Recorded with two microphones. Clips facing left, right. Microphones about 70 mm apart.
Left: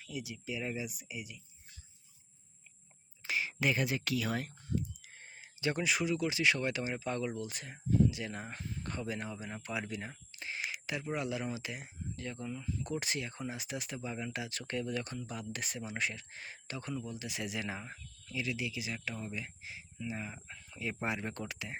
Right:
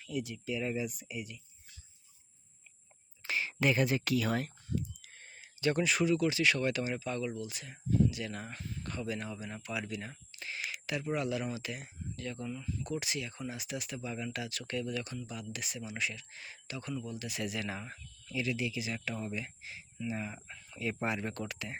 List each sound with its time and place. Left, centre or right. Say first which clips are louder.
0.0 s speech: right 5 dB; centre
3.2 s speech: right 2 dB; centre
5.1 s speech: left 1 dB; centre
7.0 s speech: even; left; by 12.7 s centre
12.8 s speech: even; left
14.6 s speech: even; left
18.3 s speech: right 3 dB; centre
20.7 s speech: right 2 dB; centre